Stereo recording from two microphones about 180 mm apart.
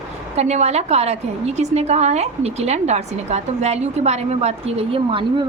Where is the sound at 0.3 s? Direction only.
35° right (ahead or behind).